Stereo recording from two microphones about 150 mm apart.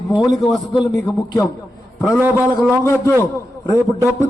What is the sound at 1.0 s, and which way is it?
Speech, 25° left (ahead or behind).